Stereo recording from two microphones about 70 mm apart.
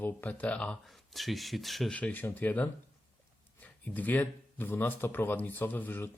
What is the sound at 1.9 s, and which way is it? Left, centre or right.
Speech, left.